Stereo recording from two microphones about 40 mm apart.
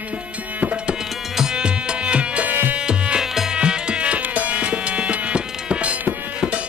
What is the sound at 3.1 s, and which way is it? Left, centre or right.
Music, centre.